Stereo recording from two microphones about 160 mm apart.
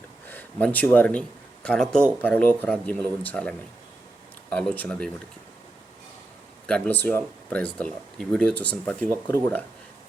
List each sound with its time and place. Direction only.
0.3 s speech: 10° left (ahead or behind)
6.7 s speech: 10° left (ahead or behind)